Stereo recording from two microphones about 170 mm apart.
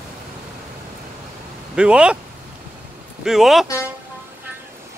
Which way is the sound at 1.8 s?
5° right (ahead or behind).